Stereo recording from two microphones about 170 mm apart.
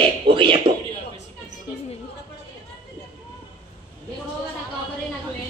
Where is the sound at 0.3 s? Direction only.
30° right (ahead or behind).